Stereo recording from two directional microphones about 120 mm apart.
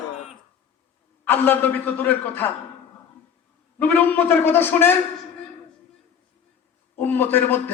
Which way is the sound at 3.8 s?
15° left (ahead or behind).